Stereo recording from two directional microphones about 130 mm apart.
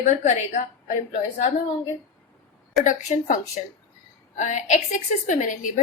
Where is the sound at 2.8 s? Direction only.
70° left (ahead or behind).